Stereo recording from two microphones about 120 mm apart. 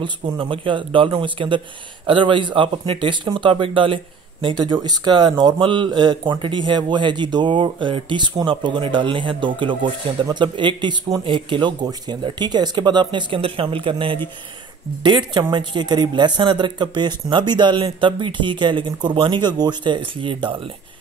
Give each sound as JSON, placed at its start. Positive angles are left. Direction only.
{"t": 0.0, "sound": "a woman's voice", "side_deg": -45}